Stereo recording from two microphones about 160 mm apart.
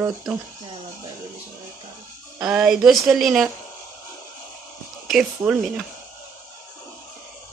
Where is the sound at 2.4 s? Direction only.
5° right (ahead or behind).